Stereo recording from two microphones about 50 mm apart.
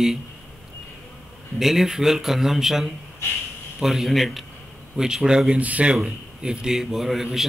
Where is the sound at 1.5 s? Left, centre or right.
Centre.